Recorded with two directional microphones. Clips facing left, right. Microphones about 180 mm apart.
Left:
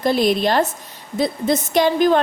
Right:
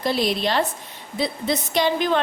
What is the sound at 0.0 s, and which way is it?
A woman's voice, 50° left (ahead or behind).